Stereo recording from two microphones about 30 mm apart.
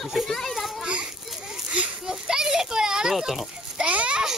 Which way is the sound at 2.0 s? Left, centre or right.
Right.